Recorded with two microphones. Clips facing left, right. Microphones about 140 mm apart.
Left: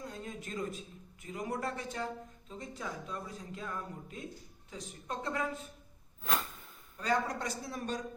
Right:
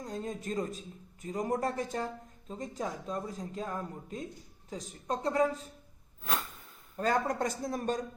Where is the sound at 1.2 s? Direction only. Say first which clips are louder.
Right 5 dB; 40° right (ahead or behind).